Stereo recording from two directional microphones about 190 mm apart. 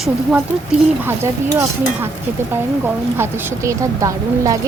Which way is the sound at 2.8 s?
15° right (ahead or behind).